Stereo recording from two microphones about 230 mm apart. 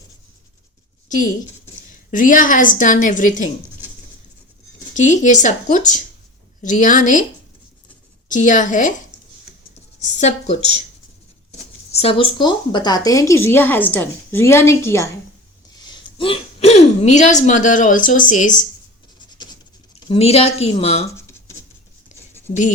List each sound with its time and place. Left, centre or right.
2.0 s speech: left
4.9 s speech: left
8.3 s speech: left
10.0 s a woman's voice: left
11.9 s a woman's voice: left
16.1 s speech: left
20.1 s a woman's voice: left
22.4 s speech: left